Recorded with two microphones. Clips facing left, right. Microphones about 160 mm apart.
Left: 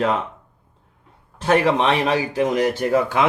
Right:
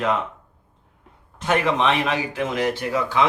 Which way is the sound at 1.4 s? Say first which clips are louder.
Left 3 dB; 30° left (ahead or behind).